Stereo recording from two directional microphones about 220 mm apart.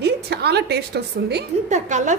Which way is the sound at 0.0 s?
50° right (ahead or behind).